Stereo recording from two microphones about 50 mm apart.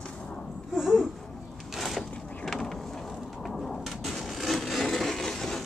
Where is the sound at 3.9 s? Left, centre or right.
Centre.